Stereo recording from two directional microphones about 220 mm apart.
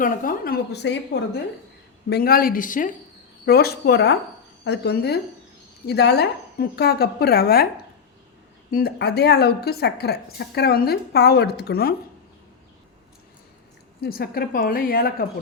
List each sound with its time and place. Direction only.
0.0 s a woman's voice: 40° left (ahead or behind)
8.7 s a woman's voice: 45° left (ahead or behind)
14.0 s a woman's voice: 45° left (ahead or behind)